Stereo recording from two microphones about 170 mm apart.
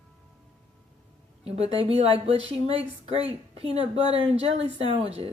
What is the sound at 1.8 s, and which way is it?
Speech, 35° right (ahead or behind).